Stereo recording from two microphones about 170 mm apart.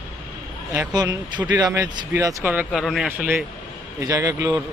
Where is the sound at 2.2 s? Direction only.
20° right (ahead or behind).